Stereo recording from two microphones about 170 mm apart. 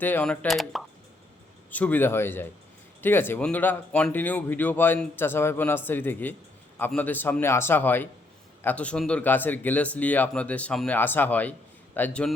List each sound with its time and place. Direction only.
0.0 s speech: 10° left (ahead or behind)